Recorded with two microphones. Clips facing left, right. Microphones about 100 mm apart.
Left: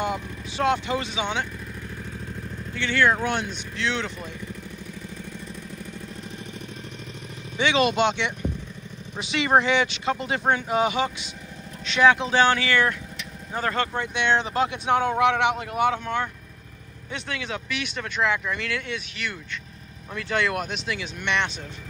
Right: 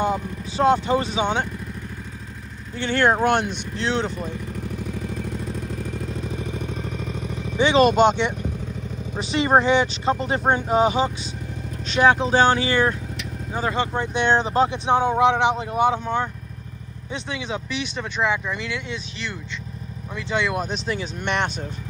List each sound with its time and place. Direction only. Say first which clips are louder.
0.0 s speech: right 5 dB; 30° right (ahead or behind)
2.7 s speech: right 2 dB; 40° right (ahead or behind)
3.3 s speech: right 7 dB; 65° right (ahead or behind)
3.7 s speech: right 4 dB; 35° right (ahead or behind)
7.5 s speech: right 5 dB; 35° right (ahead or behind)
13.5 s speech: right 2 dB; 15° right (ahead or behind)
13.9 s speech: right 3 dB; 30° right (ahead or behind)
20.6 s speech: right 4 dB; 35° right (ahead or behind)